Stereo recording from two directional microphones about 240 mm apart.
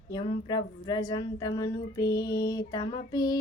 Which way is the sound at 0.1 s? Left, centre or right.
Centre.